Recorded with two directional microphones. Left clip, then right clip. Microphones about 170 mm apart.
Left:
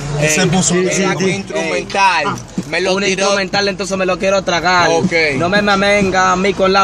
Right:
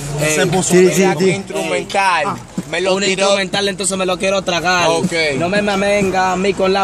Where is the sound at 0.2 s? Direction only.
55° right (ahead or behind).